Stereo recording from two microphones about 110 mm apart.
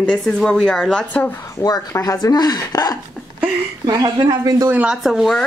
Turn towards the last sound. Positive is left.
turn(degrees=-5)  # may be behind; listen again after turning